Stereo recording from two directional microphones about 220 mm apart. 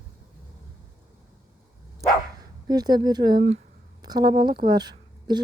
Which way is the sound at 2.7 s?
20° right (ahead or behind).